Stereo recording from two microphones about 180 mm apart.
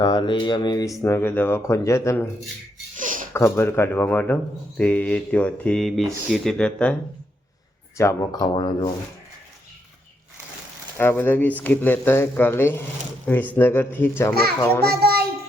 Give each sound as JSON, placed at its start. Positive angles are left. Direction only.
{"t": 0.0, "sound": "speech", "side_deg": 25}
{"t": 2.9, "sound": "a sound", "side_deg": -45}
{"t": 3.3, "sound": "speech", "side_deg": 15}
{"t": 7.9, "sound": "speech", "side_deg": 20}
{"t": 10.9, "sound": "speech", "side_deg": 10}
{"t": 14.8, "sound": "a child's voice", "side_deg": -60}